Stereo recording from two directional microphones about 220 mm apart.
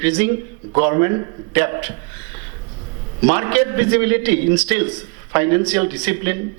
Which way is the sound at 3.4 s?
15° right (ahead or behind).